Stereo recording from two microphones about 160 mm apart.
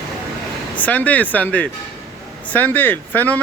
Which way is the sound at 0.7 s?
10° left (ahead or behind).